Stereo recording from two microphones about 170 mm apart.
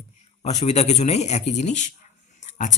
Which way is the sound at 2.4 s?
45° left (ahead or behind).